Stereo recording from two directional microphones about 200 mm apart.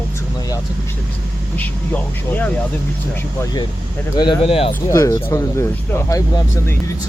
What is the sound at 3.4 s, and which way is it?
Speech, 20° left (ahead or behind).